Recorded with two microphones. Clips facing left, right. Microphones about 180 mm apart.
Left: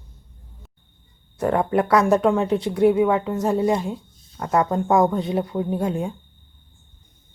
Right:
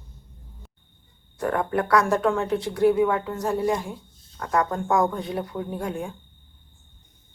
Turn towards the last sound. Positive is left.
turn(degrees=20)  # may be behind; listen again after turning